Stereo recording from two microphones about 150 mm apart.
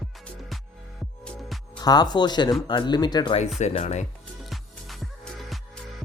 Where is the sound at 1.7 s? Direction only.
25° left (ahead or behind).